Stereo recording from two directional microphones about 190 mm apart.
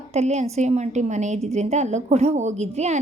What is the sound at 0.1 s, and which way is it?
A woman's voice, 35° right (ahead or behind).